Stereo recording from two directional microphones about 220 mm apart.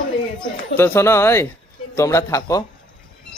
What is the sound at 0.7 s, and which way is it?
Speech, 10° left (ahead or behind).